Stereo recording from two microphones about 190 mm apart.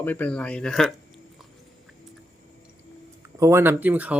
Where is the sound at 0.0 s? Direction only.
10° left (ahead or behind).